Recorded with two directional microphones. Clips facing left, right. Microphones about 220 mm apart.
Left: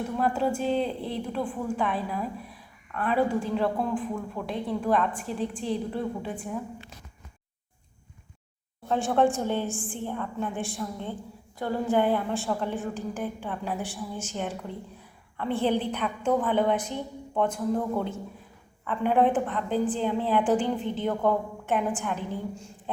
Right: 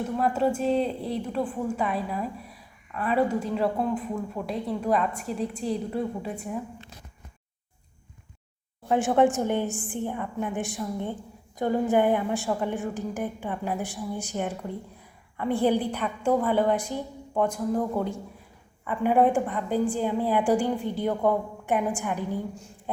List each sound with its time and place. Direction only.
0.2 s a woman's voice: centre (ahead or behind)
8.9 s a woman's voice: 15° right (ahead or behind)